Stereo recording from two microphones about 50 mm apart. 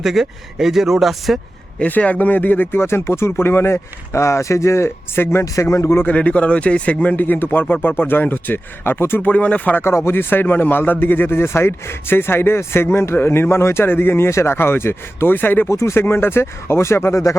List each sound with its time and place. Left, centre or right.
0.0 s speech: centre
1.9 s speech: left
2.8 s speech: left
5.4 s speech: left
6.1 s speech: left
9.2 s speech: left
9.8 s speech: left
14.3 s speech: left
15.7 s speech: left
16.0 s speech: left